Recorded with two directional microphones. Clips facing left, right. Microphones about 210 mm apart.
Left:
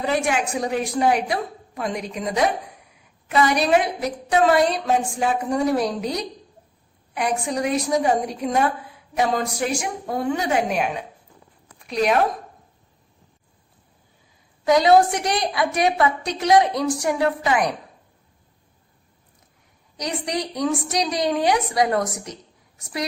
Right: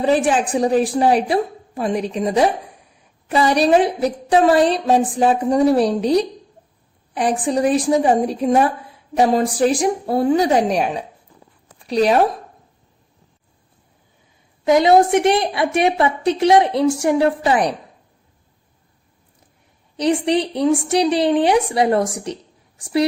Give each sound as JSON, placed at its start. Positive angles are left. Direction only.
{"t": 0.0, "sound": "a woman's voice", "side_deg": -30}
{"t": 14.6, "sound": "a woman's voice", "side_deg": -25}
{"t": 20.0, "sound": "a woman's voice", "side_deg": -30}